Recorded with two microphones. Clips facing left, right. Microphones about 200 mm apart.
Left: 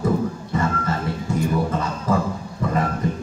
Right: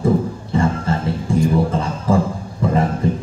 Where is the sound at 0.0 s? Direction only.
25° right (ahead or behind).